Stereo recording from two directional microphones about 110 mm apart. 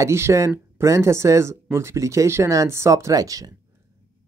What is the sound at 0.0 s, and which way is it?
Speech, 25° right (ahead or behind).